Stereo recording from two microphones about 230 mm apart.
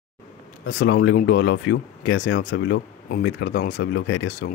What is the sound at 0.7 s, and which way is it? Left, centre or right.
Speech, left.